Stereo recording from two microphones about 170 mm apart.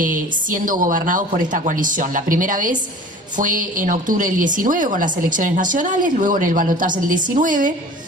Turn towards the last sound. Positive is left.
turn(degrees=-50)  # may be behind; listen again after turning